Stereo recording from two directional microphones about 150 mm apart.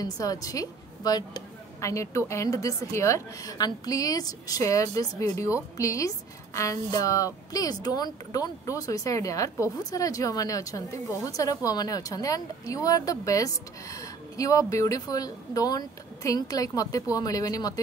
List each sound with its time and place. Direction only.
0.0 s a woman's voice: 25° left (ahead or behind)